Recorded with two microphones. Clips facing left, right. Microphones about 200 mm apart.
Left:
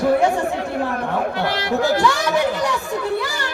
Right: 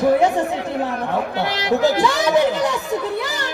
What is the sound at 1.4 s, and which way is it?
Speech, 20° right (ahead or behind).